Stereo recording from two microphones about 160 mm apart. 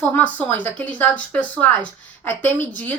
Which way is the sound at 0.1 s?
15° left (ahead or behind).